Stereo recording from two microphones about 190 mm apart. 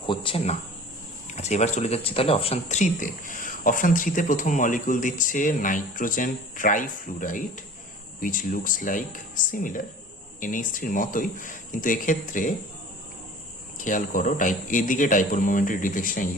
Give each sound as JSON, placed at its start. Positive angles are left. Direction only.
{"t": 0.0, "sound": "speech", "side_deg": 25}
{"t": 13.7, "sound": "speech", "side_deg": 45}